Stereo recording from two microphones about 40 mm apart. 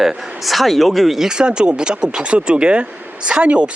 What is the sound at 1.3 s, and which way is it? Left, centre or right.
Speech, centre.